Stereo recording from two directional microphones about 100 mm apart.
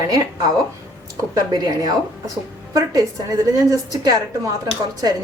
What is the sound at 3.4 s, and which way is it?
Speech, 35° right (ahead or behind).